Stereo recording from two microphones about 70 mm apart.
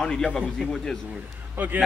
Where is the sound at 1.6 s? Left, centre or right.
Right.